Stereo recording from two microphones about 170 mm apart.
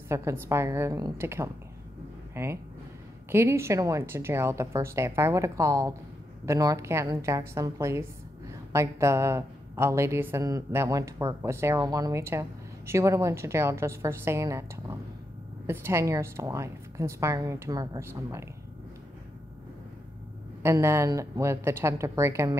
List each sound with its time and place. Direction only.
0.1 s a woman's voice: 15° right (ahead or behind)
20.6 s a woman's voice: 15° right (ahead or behind)